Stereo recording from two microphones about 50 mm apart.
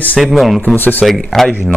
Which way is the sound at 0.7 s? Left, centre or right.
Left.